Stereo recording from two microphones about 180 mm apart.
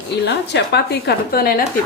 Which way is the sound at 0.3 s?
70° left (ahead or behind).